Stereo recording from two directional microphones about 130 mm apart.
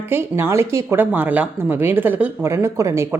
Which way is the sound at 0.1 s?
20° right (ahead or behind).